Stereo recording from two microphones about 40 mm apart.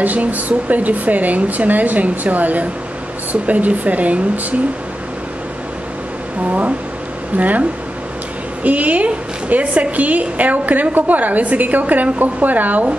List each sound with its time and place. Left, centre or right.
0.0 s speech: right
7.3 s speech: right
8.6 s a woman's voice: right